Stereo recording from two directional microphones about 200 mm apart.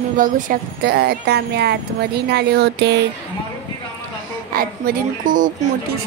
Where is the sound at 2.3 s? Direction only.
55° right (ahead or behind).